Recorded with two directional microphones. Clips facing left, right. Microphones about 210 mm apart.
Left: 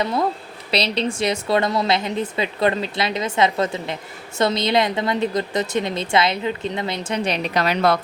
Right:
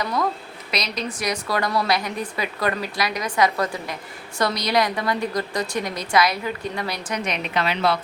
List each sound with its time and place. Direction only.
0.0 s a woman's voice: 25° left (ahead or behind); by 7.9 s 45° left (ahead or behind)